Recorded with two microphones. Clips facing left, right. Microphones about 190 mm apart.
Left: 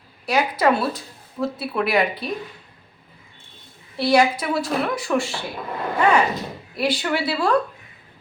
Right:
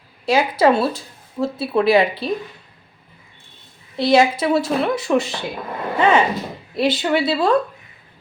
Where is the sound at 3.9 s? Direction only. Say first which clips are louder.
Right 3 dB; 20° right (ahead or behind).